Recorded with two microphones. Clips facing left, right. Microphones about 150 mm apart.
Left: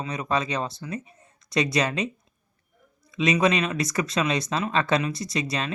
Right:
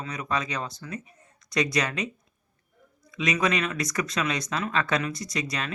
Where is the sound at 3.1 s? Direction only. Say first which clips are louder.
Left 4 dB; 25° left (ahead or behind).